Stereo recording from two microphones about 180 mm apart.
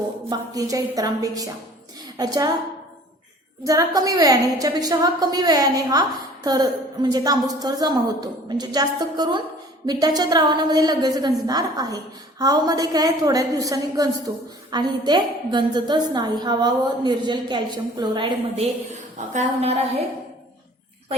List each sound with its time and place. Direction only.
0.3 s a woman's voice: 20° right (ahead or behind)
3.6 s a woman's voice: 20° right (ahead or behind); by 20.1 s 35° right (ahead or behind)